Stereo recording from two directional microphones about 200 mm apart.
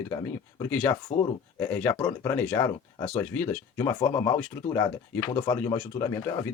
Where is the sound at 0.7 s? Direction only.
5° left (ahead or behind).